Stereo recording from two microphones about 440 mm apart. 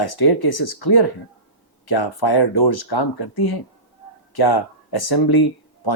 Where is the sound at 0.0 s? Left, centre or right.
Left.